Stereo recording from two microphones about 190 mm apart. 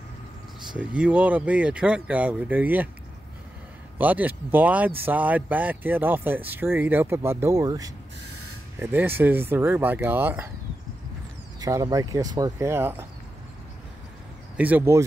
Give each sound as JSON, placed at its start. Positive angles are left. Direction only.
{"t": 0.7, "sound": "speech", "side_deg": -5}
{"t": 4.0, "sound": "speech", "side_deg": -10}
{"t": 11.6, "sound": "speech", "side_deg": -20}
{"t": 14.6, "sound": "speech", "side_deg": -10}